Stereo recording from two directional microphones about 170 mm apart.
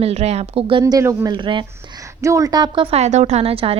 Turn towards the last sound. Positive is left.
turn(degrees=-35)  # may be behind; listen again after turning